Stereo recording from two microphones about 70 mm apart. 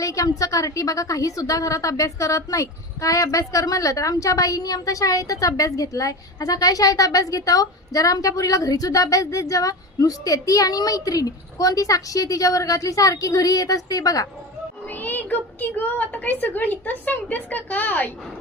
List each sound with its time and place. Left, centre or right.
0.0 s a woman's voice: left
14.8 s a woman's voice: left